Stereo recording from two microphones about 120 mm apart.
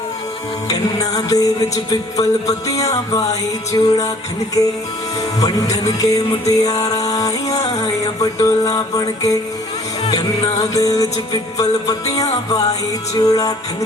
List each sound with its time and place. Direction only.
0.7 s music: 30° left (ahead or behind)
10.6 s music: 30° left (ahead or behind)